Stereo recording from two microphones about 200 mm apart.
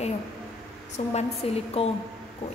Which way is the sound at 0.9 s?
30° left (ahead or behind).